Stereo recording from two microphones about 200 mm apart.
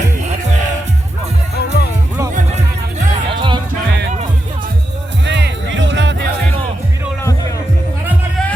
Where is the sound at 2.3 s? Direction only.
35° right (ahead or behind).